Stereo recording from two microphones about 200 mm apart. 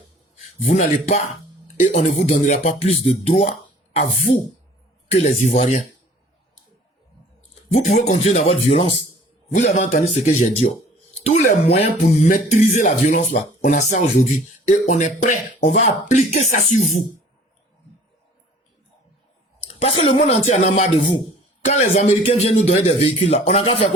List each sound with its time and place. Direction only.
0.6 s speech: 35° left (ahead or behind)
7.7 s speech: 35° left (ahead or behind)
19.6 s speech: 30° left (ahead or behind)